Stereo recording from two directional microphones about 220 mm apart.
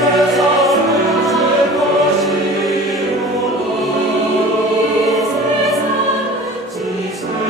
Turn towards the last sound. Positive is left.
turn(degrees=0)  # may be behind; listen again after turning